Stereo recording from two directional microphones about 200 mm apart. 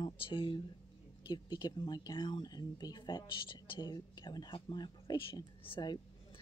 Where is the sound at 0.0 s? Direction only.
25° left (ahead or behind).